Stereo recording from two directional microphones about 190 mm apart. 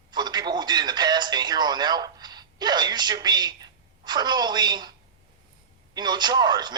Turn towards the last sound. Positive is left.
turn(degrees=-20)  # may be behind; listen again after turning